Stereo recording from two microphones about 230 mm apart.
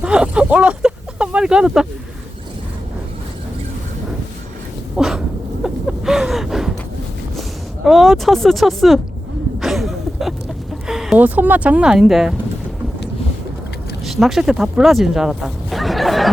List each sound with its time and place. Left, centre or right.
0.0 s speech: centre
4.9 s a sound: centre
7.9 s speech: centre
9.6 s a sound: centre
10.8 s speech: centre
14.0 s speech: centre